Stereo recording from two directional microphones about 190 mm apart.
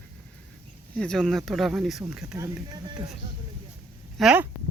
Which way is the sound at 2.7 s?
20° right (ahead or behind).